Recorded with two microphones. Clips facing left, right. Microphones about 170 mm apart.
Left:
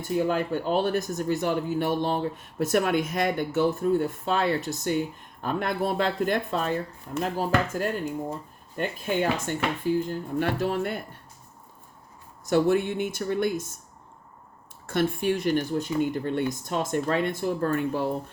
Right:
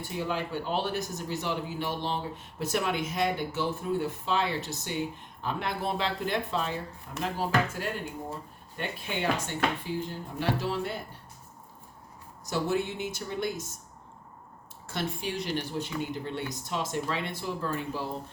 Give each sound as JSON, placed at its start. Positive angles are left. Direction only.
{"t": 0.0, "sound": "speech", "side_deg": 50}
{"t": 12.5, "sound": "speech", "side_deg": 55}
{"t": 14.8, "sound": "speech", "side_deg": 55}